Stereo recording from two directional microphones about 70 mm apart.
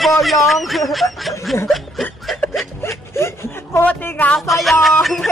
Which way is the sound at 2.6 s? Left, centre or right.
Left.